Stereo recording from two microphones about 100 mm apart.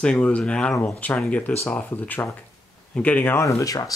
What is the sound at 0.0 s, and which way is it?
Speech, 10° left (ahead or behind).